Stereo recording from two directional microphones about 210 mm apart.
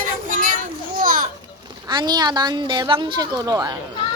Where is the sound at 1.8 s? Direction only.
20° right (ahead or behind).